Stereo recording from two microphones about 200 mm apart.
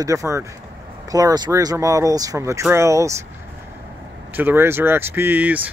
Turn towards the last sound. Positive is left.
turn(degrees=-10)  # may be behind; listen again after turning